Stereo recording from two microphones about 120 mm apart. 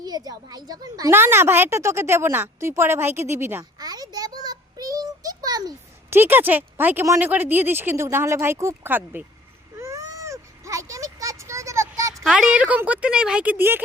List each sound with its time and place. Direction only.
0.0 s a woman's voice: 30° right (ahead or behind)
1.1 s a woman's voice: 20° right (ahead or behind)
3.8 s child singing: 30° right (ahead or behind)
6.1 s speech: 15° right (ahead or behind)
9.7 s a sound: 25° right (ahead or behind)
12.2 s speech: 5° right (ahead or behind)